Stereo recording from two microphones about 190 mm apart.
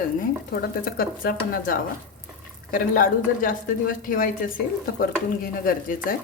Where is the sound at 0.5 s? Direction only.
50° left (ahead or behind).